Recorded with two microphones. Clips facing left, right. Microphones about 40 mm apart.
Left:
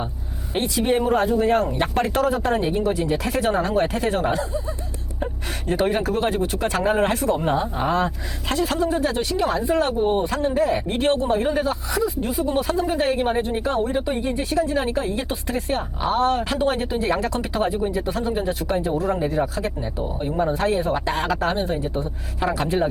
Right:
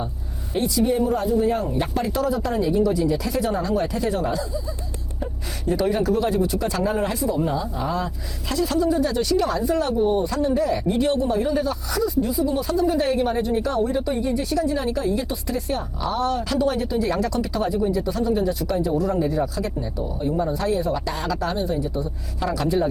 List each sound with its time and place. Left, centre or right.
0.5 s speech: left
9.3 s speech: left